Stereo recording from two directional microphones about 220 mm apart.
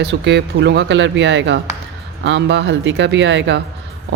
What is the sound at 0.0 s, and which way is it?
Speech, 50° right (ahead or behind).